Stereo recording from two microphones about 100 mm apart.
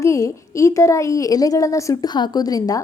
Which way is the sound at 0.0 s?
30° left (ahead or behind).